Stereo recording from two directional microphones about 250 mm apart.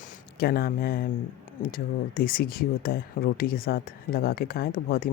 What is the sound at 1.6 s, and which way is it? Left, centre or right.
Speech, left.